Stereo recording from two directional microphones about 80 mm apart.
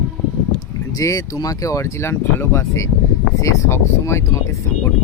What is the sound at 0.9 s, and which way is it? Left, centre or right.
Speech, left.